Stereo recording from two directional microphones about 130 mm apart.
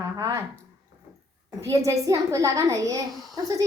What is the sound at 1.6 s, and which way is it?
A woman's voice, 25° right (ahead or behind).